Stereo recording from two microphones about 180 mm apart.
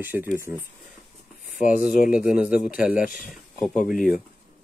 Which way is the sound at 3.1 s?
50° left (ahead or behind).